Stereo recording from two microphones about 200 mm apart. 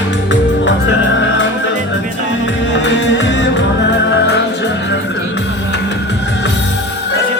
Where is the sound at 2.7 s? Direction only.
65° left (ahead or behind).